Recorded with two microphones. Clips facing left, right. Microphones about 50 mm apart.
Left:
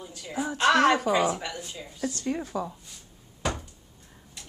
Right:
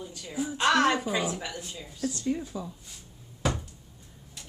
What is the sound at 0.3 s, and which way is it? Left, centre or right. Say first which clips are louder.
Speech: left 2 dB; left.